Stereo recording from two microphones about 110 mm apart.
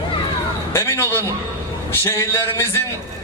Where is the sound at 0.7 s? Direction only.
25° left (ahead or behind).